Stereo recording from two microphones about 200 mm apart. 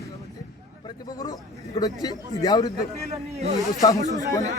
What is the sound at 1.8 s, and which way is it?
Speech, 20° left (ahead or behind).